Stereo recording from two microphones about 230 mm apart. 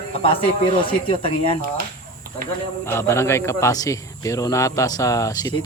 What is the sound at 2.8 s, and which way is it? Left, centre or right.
Speech, centre.